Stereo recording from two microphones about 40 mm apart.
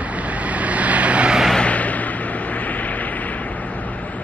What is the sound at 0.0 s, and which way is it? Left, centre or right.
Vehicle, right.